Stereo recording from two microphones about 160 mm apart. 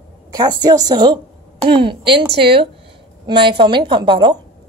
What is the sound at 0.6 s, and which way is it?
A woman's voice, 25° right (ahead or behind).